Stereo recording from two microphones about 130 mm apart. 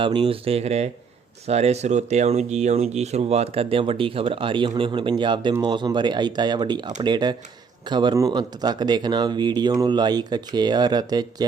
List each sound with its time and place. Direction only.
0.0 s speech: 40° right (ahead or behind)